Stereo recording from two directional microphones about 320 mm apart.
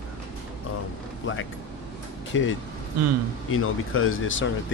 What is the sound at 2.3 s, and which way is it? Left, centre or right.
Speech, left.